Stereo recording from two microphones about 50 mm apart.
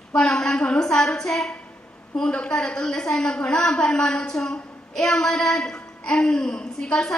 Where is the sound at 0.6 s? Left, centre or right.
Left.